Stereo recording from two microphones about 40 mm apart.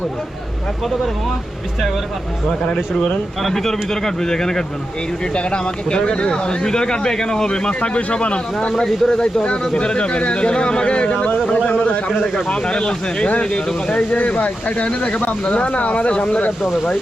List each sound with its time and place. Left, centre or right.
2.5 s speech: centre
3.4 s speech: centre
5.3 s speech: left
8.8 s speech: centre
11.5 s a sound: left
12.6 s speech: centre
13.9 s speech: left